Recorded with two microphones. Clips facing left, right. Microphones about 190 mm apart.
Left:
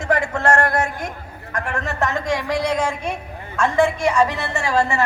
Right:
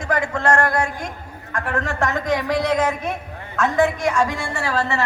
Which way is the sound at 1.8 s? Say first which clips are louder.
Even; 5° left (ahead or behind).